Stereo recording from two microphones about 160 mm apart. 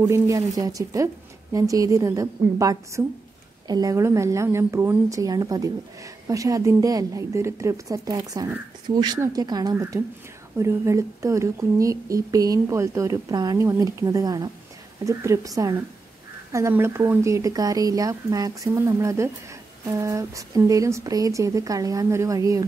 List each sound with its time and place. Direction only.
0.0 s speech: 20° right (ahead or behind)